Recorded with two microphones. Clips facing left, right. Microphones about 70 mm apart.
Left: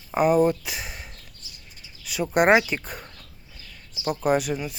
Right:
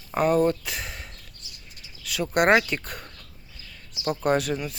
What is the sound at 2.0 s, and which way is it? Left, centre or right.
Speech, centre.